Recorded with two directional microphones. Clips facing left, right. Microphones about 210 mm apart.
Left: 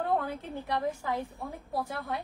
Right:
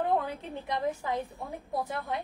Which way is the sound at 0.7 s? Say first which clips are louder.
Right 1 dB; 20° right (ahead or behind).